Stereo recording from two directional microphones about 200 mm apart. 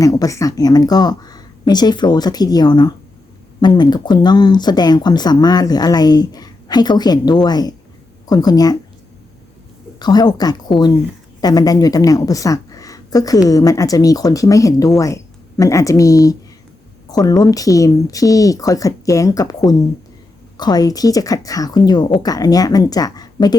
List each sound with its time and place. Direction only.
0.0 s speech: 15° left (ahead or behind)
10.0 s a woman's voice: 20° left (ahead or behind)